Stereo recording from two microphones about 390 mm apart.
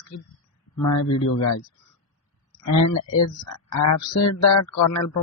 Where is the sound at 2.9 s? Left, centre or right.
Left.